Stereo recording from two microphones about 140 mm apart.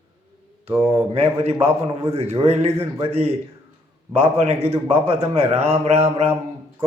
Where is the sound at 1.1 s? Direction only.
45° right (ahead or behind).